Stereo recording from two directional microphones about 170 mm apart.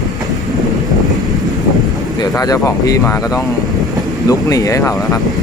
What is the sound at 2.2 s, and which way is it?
Speech, 20° left (ahead or behind).